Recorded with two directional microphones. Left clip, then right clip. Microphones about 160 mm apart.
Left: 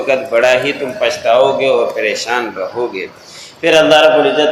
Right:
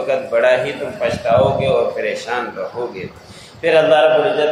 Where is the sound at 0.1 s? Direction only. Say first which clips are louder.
Left 3 dB; 30° left (ahead or behind).